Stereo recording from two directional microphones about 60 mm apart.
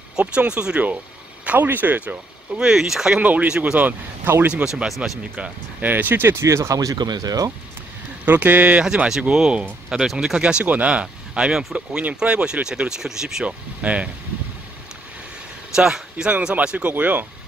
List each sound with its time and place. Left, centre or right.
0.2 s speech: right
2.7 s speech: centre
3.2 s speech: right
3.4 s speech: centre
4.4 s speech: right
4.8 s speech: centre
5.2 s speech: right
6.4 s speech: right
8.3 s speech: right
8.8 s speech: centre
13.8 s speech: right
15.7 s a man's voice: centre
16.9 s speech: right